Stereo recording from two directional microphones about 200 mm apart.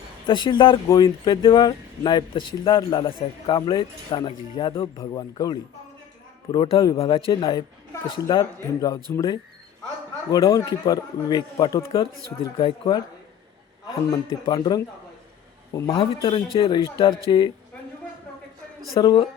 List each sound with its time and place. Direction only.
0.3 s speech: 25° left (ahead or behind)
14.4 s speech: 20° left (ahead or behind)
18.9 s speech: 25° left (ahead or behind)